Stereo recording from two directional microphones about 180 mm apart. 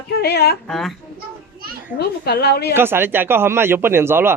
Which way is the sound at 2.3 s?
65° left (ahead or behind).